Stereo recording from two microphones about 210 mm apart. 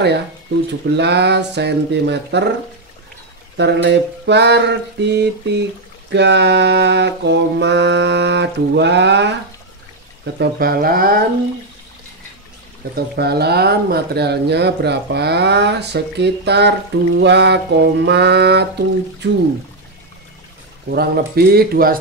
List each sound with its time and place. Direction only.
0.7 s speech: 55° right (ahead or behind)
3.5 s mantra: 55° right (ahead or behind)
10.4 s speech: 45° right (ahead or behind)
12.9 s speech: 50° right (ahead or behind)
20.9 s speech: 50° right (ahead or behind)